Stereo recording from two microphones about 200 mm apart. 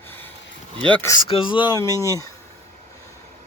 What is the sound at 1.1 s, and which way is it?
Speech, 25° left (ahead or behind).